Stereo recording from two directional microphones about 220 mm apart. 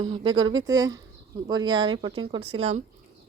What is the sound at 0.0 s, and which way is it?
Speech, 20° right (ahead or behind).